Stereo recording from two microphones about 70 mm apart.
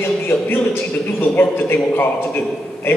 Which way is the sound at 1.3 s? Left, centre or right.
Left.